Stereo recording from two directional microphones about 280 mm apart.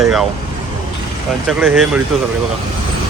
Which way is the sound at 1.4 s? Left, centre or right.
Centre.